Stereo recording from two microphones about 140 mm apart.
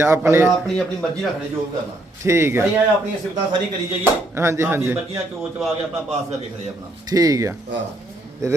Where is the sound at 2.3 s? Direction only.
20° right (ahead or behind).